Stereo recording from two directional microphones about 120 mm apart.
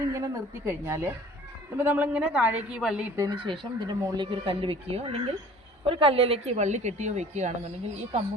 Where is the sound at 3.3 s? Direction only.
45° right (ahead or behind); by 7.5 s 75° right (ahead or behind).